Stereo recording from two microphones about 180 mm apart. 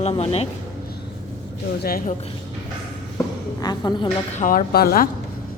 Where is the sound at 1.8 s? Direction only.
50° left (ahead or behind).